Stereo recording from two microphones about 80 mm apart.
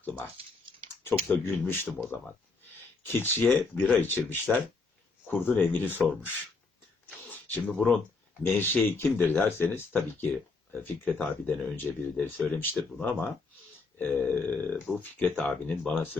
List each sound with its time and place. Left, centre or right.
1.0 s speech: left
7.1 s speech: centre
14.9 s speech: centre
15.2 s speech: centre